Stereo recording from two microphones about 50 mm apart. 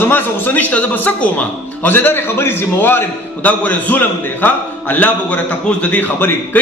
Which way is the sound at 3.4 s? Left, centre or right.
Left.